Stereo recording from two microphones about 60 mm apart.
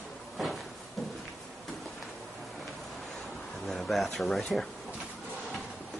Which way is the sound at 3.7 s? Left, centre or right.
Centre.